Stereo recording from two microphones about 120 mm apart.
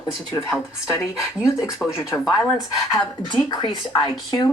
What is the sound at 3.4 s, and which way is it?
Speech, 35° left (ahead or behind).